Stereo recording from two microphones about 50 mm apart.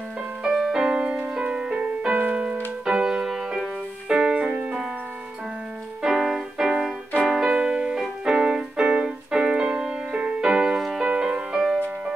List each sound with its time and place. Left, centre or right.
0.4 s music: centre; by 2.5 s right
2.8 s music: centre
6.0 s music: centre
7.2 s keyboard: centre